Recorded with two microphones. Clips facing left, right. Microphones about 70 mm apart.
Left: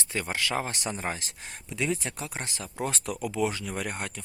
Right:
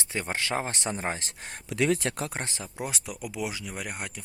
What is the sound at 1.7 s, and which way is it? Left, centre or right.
Speech, right.